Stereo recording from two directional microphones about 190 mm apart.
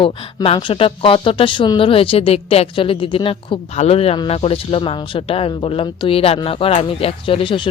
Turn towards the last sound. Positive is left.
turn(degrees=25)  # may be behind; listen again after turning